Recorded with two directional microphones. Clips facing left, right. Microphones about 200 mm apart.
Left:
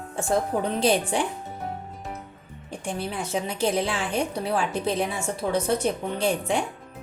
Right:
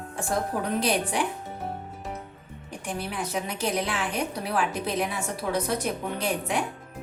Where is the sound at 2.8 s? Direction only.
25° left (ahead or behind).